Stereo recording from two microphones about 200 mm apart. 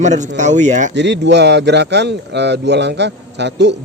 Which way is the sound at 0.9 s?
60° right (ahead or behind).